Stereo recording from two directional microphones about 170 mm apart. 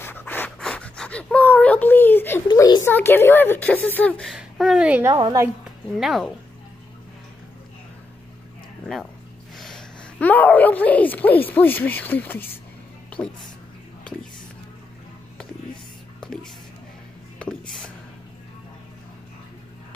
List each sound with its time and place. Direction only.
0.0 s pant: 10° left (ahead or behind)
2.4 s a woman's voice: 25° left (ahead or behind); by 5.1 s 10° right (ahead or behind)
5.1 s a woman's voice: 20° right (ahead or behind)
5.9 s speech: centre (ahead or behind)
9.6 s a woman's voice: 5° left (ahead or behind)
17.4 s music: 5° left (ahead or behind)